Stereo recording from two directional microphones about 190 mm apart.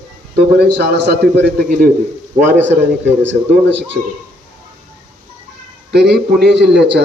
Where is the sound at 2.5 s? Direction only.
10° right (ahead or behind).